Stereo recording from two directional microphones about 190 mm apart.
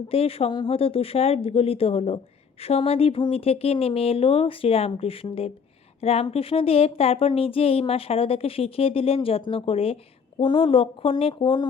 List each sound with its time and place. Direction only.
0.1 s a woman's voice: 30° left (ahead or behind)